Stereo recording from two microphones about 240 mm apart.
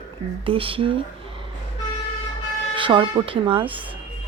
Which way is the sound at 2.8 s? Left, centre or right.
Centre.